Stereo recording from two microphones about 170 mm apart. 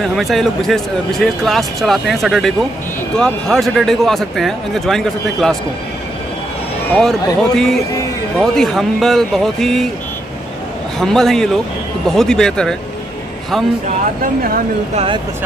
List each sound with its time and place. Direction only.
0.0 s speech: centre (ahead or behind)
6.9 s speech: 5° left (ahead or behind)
11.0 s speech: centre (ahead or behind)
14.2 s speech: 55° right (ahead or behind)